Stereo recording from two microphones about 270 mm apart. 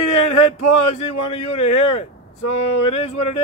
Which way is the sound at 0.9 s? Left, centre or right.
Left.